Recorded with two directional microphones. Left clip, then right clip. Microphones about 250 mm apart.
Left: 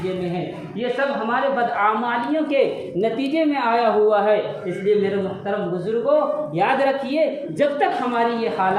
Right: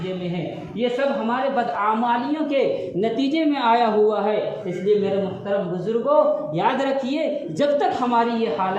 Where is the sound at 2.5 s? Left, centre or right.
Right.